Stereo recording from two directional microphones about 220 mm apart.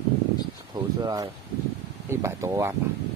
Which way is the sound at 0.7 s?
15° right (ahead or behind).